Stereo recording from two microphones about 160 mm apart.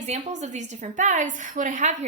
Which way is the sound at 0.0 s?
45° right (ahead or behind).